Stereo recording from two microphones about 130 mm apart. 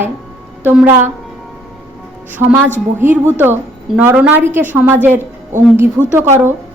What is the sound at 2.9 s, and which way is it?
A woman's voice, 15° right (ahead or behind).